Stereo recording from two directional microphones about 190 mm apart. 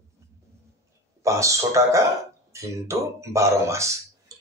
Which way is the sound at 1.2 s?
15° right (ahead or behind).